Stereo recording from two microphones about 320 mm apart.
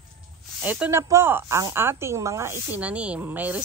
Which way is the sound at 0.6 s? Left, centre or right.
Centre.